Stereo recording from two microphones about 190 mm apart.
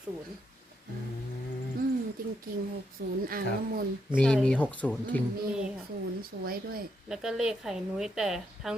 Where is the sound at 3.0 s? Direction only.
55° right (ahead or behind).